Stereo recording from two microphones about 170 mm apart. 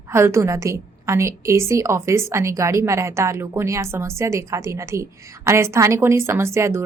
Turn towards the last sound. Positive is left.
turn(degrees=-15)  # may be behind; listen again after turning